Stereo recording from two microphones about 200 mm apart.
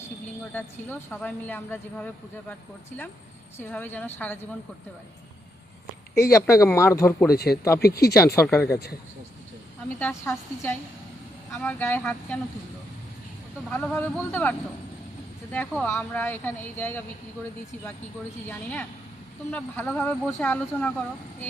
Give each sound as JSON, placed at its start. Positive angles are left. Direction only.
{"t": 0.5, "sound": "speech", "side_deg": 10}
{"t": 3.6, "sound": "speech", "side_deg": 10}
{"t": 6.3, "sound": "speech", "side_deg": 15}
{"t": 7.3, "sound": "speech", "side_deg": 50}
{"t": 8.4, "sound": "speech", "side_deg": 15}
{"t": 10.0, "sound": "speech", "side_deg": 10}
{"t": 13.7, "sound": "speech", "side_deg": 5}
{"t": 15.5, "sound": "speech", "side_deg": 10}
{"t": 18.4, "sound": "speech", "side_deg": 10}